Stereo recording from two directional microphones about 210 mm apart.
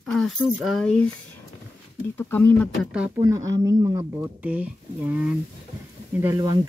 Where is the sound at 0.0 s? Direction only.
5° left (ahead or behind).